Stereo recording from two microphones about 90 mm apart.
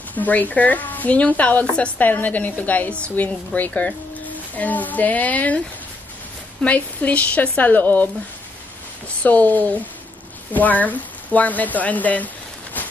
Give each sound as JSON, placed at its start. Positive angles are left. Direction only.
{"t": 0.1, "sound": "speech", "side_deg": 20}
{"t": 6.6, "sound": "speech", "side_deg": 15}
{"t": 9.2, "sound": "speech", "side_deg": 15}
{"t": 12.8, "sound": "a sound", "side_deg": 20}